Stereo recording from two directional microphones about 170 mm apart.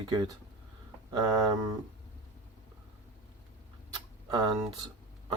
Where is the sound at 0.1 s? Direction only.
25° right (ahead or behind).